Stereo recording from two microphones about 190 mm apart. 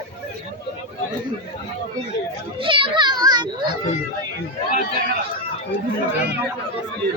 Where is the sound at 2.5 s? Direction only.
25° right (ahead or behind).